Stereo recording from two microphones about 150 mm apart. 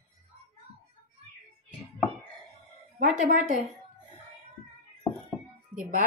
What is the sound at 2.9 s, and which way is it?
Speech, 55° right (ahead or behind).